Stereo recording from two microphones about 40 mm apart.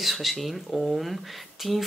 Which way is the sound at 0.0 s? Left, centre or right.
Centre.